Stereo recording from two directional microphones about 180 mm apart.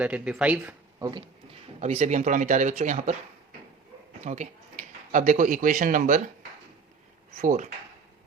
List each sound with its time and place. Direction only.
0.0 s speech: 5° right (ahead or behind)
0.9 s speech: 20° right (ahead or behind)
1.8 s speech: 40° right (ahead or behind)
4.2 s speech: 40° right (ahead or behind)
7.4 s speech: 40° right (ahead or behind)